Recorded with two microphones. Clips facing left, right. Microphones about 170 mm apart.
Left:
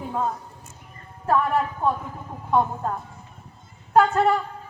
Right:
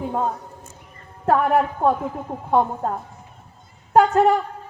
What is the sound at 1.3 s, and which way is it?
Speech, 55° right (ahead or behind).